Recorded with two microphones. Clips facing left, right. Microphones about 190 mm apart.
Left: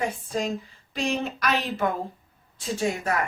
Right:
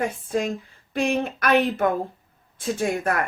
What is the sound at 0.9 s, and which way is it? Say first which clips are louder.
Speech: right 4 dB; 55° right (ahead or behind).